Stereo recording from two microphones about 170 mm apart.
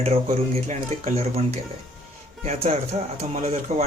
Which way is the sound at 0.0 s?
35° right (ahead or behind).